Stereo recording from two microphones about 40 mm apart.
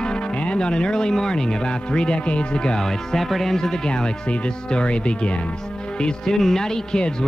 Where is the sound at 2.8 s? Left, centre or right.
Centre.